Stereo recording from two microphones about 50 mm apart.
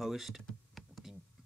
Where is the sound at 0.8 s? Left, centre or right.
Centre.